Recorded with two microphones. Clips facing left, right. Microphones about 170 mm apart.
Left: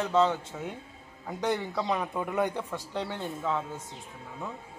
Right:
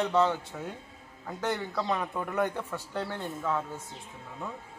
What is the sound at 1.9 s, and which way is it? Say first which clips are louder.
Speech: left 2 dB; 10° left (ahead or behind).